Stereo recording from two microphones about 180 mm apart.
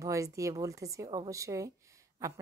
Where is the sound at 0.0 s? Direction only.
15° right (ahead or behind).